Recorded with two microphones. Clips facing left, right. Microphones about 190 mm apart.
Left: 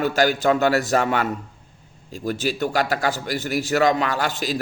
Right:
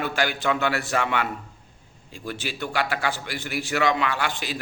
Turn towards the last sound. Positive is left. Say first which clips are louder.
# left 5 dB
turn(degrees=40)  # may be behind; listen again after turning